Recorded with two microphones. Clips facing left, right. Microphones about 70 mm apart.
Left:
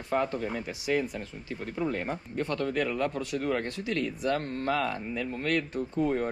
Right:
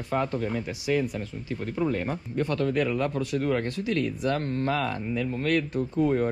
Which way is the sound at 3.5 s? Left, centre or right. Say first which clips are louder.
Right 3 dB; left.